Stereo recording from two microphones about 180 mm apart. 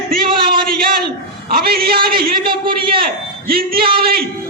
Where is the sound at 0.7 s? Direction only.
55° right (ahead or behind).